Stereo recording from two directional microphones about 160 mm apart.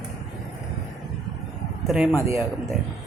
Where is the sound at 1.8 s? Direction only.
5° right (ahead or behind).